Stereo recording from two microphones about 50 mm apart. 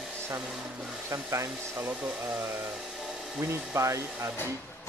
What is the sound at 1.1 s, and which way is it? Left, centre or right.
Speech, right.